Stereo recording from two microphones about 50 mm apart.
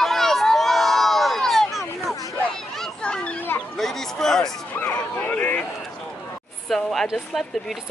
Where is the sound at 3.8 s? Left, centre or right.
Centre.